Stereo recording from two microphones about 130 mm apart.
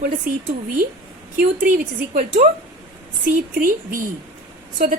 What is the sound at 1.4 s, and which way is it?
A woman's voice, 90° right.